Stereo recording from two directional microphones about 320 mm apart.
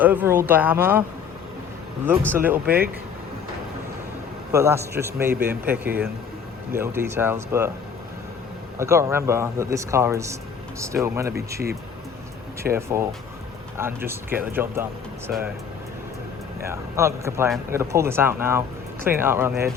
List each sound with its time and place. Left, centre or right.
0.0 s speech: centre
2.3 s speech: centre
2.6 s speech: right
4.5 s speech: centre
8.8 s speech: centre
12.7 s speech: centre
16.6 s speech: centre